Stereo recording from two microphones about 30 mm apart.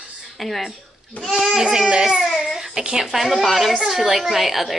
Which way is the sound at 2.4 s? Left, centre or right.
Centre.